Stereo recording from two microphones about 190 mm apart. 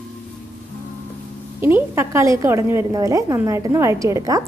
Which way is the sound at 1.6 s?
10° right (ahead or behind).